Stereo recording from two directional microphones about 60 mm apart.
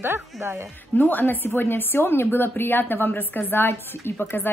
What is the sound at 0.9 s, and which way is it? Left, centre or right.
A woman's voice, left.